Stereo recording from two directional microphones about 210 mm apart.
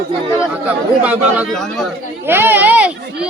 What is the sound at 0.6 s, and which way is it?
Speech, 5° right (ahead or behind).